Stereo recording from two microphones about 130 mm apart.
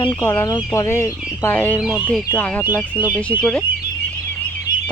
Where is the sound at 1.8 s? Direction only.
5° right (ahead or behind).